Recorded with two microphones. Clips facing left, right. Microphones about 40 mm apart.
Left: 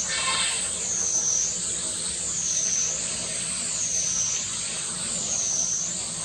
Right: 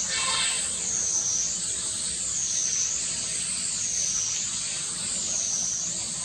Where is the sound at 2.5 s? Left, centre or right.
Centre.